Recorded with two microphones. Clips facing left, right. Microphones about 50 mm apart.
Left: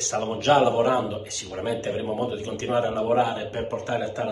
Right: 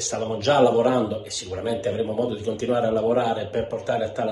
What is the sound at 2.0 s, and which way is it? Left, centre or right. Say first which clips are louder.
Speech: right 3 dB; left.